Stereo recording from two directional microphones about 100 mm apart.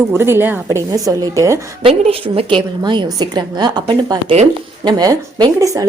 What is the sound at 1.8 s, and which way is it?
Speech, 80° right.